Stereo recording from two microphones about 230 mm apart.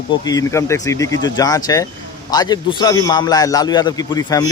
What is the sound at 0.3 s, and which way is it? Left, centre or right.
A man's voice, centre.